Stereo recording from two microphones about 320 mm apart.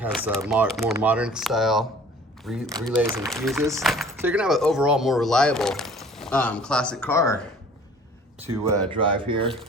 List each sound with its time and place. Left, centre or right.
0.0 s speech: centre
8.6 s speech: centre